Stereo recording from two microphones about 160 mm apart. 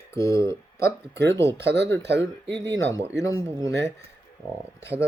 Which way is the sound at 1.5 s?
90° right.